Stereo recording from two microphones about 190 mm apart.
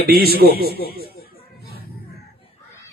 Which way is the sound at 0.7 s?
55° left (ahead or behind).